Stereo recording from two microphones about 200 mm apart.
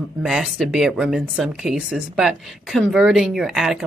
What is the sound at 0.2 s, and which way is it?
Speech, 5° right (ahead or behind).